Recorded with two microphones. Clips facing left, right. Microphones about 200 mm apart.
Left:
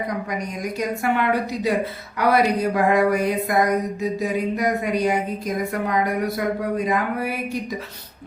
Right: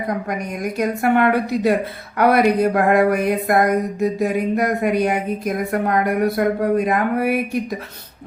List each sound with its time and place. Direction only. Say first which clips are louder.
0.3 s speech: right 3 dB; 55° right (ahead or behind)